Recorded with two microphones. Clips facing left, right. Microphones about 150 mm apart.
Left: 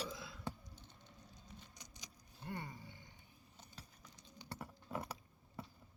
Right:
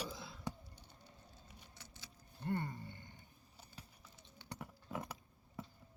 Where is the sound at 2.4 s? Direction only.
55° right (ahead or behind).